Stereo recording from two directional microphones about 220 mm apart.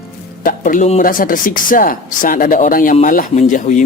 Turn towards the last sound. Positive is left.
turn(degrees=35)  # may be behind; listen again after turning